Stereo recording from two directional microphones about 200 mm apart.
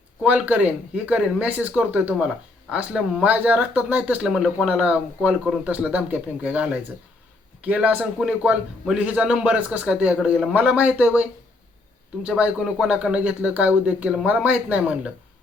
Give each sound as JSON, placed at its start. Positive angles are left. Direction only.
{"t": 0.2, "sound": "a man's voice", "side_deg": -5}